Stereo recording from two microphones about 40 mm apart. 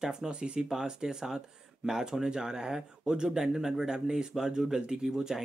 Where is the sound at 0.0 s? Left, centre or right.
Centre.